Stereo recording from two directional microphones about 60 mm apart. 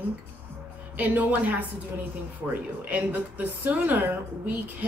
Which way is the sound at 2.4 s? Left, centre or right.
Centre.